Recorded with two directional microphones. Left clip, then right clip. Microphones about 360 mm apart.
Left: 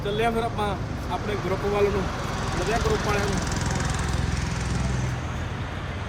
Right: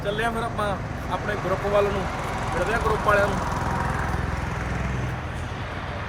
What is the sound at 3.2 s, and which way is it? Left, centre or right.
Speech, centre.